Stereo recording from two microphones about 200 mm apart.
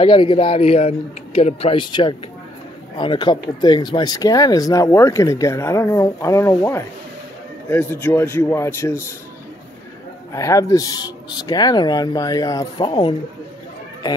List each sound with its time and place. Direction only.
0.0 s speech: 25° left (ahead or behind)
10.3 s speech: 15° left (ahead or behind)